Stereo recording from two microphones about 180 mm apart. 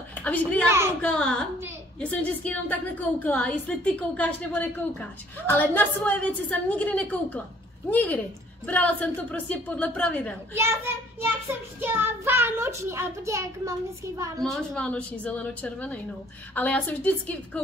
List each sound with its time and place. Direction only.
0.1 s a woman's voice: 10° left (ahead or behind)
0.7 s a child's voice: 15° right (ahead or behind)
1.0 s a woman's voice: 5° left (ahead or behind)
10.5 s a child's voice: 15° right (ahead or behind)
14.4 s a woman's voice: 5° left (ahead or behind)